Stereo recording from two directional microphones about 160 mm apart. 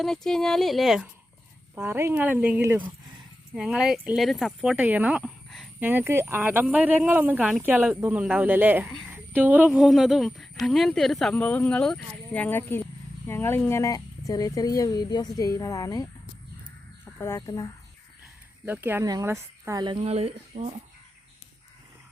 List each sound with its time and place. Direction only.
0.0 s speech: centre (ahead or behind)
1.7 s speech: 15° right (ahead or behind); by 16.0 s 20° left (ahead or behind)
17.2 s speech: 15° left (ahead or behind)
18.6 s a woman's voice: 10° right (ahead or behind)
19.8 s speech: 35° right (ahead or behind)